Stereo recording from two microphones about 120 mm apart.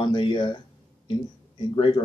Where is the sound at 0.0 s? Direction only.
40° left (ahead or behind).